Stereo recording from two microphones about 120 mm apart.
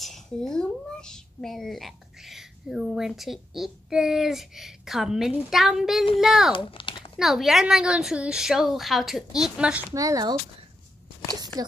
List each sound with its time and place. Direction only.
0.0 s a woman's voice: 5° left (ahead or behind)
6.5 s typing: 45° left (ahead or behind)
7.2 s a woman's voice: centre (ahead or behind)
9.9 s speech: 30° right (ahead or behind)